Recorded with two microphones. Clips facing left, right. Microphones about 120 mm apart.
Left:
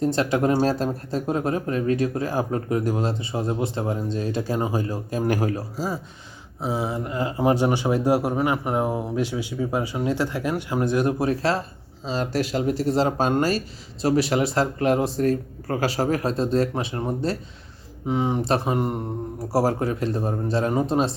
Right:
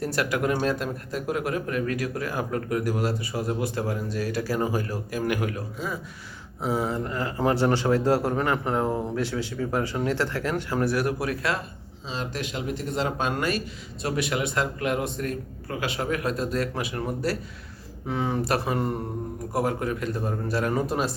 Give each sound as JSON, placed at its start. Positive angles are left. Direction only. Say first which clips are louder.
{"t": 0.0, "sound": "speech", "louder": "left 5 dB", "side_deg": 25}
{"t": 6.6, "sound": "speech", "louder": "even", "side_deg": 15}
{"t": 19.4, "sound": "speech", "louder": "left 5 dB", "side_deg": 35}